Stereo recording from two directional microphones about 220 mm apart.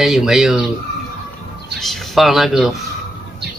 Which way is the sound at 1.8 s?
Centre (ahead or behind).